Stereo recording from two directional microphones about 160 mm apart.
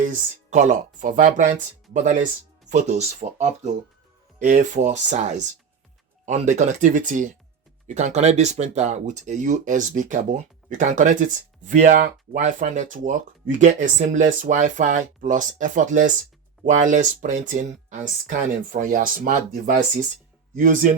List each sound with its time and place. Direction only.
0.0 s speech: 50° right (ahead or behind)